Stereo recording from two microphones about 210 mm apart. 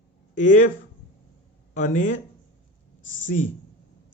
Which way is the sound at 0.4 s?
35° left (ahead or behind).